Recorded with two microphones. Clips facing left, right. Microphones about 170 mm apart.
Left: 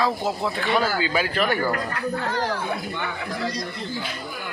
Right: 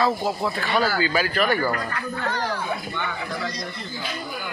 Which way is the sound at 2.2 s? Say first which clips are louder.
Right 2 dB; 35° left (ahead or behind).